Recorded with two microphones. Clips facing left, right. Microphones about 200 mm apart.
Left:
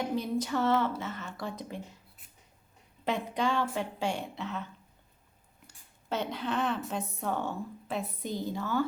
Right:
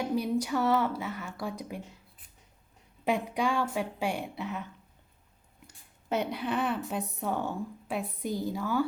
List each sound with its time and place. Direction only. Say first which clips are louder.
0.2 s a woman's voice: right 2 dB; 10° right (ahead or behind)
3.0 s a woman's voice: right 2 dB; 15° right (ahead or behind)
6.1 s a woman's voice: right 2 dB; 15° right (ahead or behind)